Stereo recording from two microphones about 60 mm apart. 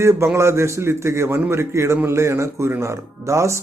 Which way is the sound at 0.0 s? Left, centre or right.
Right.